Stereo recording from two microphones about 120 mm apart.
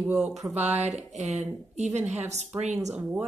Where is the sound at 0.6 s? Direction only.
65° right (ahead or behind).